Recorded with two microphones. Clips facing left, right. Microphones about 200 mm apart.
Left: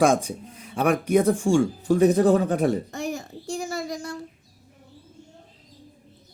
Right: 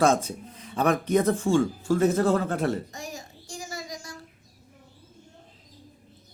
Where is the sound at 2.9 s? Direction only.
60° left (ahead or behind).